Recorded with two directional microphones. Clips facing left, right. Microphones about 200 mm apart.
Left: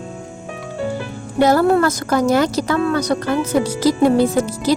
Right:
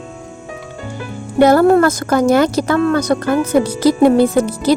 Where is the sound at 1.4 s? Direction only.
55° right (ahead or behind).